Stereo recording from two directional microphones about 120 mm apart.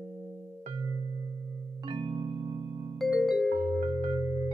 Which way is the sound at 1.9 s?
45° right (ahead or behind).